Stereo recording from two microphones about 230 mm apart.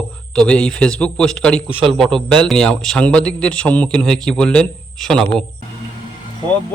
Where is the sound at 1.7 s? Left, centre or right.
Right.